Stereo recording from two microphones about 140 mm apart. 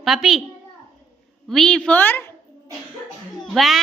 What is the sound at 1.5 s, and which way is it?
Speech, 5° left (ahead or behind).